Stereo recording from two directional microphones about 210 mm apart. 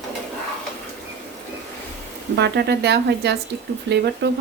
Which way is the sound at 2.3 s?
50° right (ahead or behind).